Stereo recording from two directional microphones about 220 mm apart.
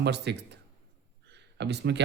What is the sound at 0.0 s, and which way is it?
Speech, 50° right (ahead or behind).